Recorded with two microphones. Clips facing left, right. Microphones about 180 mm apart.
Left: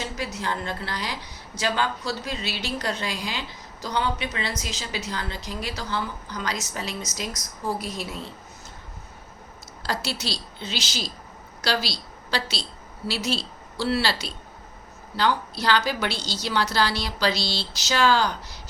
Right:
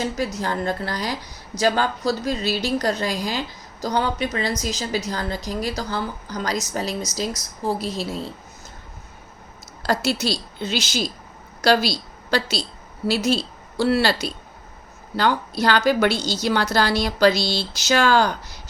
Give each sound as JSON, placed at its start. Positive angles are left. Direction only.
{"t": 0.3, "sound": "a woman's voice", "side_deg": -40}
{"t": 9.8, "sound": "a woman's voice", "side_deg": -45}